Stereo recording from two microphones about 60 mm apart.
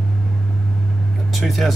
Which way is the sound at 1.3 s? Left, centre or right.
Centre.